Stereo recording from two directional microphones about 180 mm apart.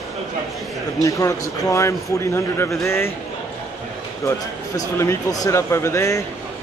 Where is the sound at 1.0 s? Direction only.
20° left (ahead or behind).